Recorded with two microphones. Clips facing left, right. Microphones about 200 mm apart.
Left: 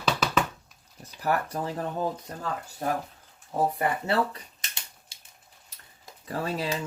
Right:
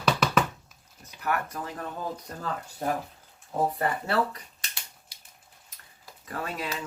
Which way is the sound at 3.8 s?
20° left (ahead or behind).